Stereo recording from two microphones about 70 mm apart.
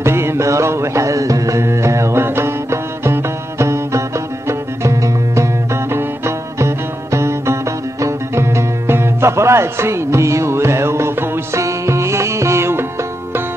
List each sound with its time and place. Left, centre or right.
0.0 s music: right